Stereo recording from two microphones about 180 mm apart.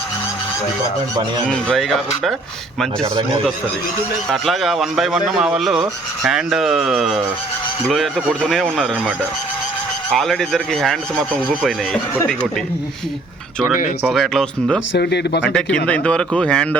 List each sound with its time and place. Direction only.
1.5 s speech: centre (ahead or behind)
4.3 s speech: centre (ahead or behind)
14.1 s speech: centre (ahead or behind)
14.9 s speech: 65° left (ahead or behind)
15.4 s speech: 5° left (ahead or behind)